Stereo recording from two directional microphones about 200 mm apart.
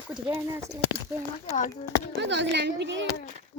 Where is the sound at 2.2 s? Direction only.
60° right (ahead or behind).